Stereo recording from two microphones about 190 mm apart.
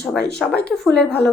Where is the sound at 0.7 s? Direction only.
5° left (ahead or behind).